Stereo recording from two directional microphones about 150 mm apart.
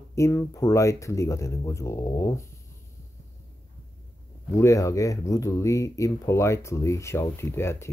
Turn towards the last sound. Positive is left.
turn(degrees=15)  # may be behind; listen again after turning